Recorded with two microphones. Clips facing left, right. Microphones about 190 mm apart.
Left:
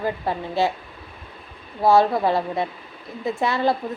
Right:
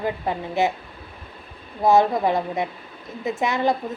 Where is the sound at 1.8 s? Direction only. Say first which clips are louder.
Even; 20° right (ahead or behind).